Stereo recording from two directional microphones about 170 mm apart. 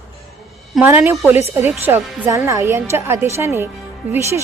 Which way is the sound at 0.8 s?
10° right (ahead or behind).